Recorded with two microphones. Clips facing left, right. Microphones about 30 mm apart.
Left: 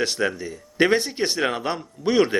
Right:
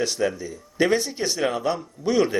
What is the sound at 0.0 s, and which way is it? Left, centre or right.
A man's voice, left.